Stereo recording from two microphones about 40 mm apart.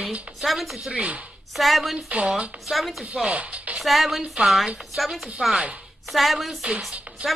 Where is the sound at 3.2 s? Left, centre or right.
Right.